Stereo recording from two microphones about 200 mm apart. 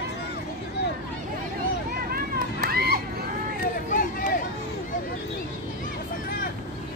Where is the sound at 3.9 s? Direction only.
45° left (ahead or behind).